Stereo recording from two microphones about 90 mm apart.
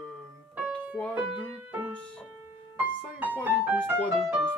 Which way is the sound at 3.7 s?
25° right (ahead or behind).